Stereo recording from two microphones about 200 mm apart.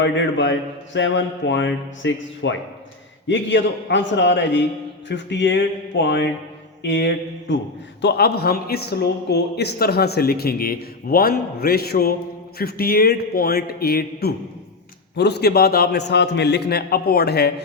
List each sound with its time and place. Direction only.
0.0 s a man's voice: 65° left (ahead or behind)